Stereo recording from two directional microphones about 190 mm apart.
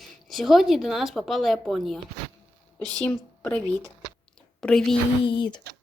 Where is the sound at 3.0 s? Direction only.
10° left (ahead or behind).